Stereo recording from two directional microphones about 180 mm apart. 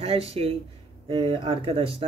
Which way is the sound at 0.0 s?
35° right (ahead or behind).